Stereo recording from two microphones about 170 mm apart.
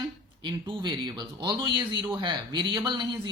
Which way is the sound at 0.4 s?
25° right (ahead or behind).